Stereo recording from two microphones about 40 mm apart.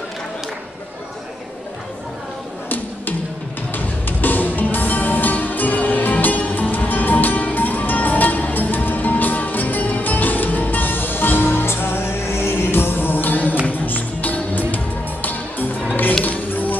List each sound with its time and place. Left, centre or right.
3.7 s music: left